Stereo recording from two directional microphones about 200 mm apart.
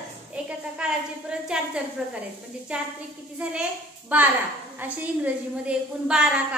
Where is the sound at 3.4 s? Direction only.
5° right (ahead or behind).